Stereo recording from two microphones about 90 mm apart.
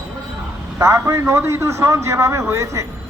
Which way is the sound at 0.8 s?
35° right (ahead or behind).